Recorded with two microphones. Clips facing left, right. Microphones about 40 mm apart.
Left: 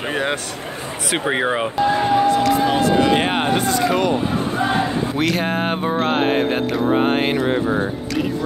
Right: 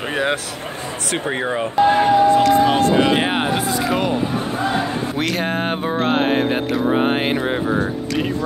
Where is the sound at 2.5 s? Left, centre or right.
Right.